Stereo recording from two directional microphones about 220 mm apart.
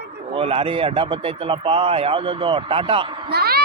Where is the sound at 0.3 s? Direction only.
25° right (ahead or behind).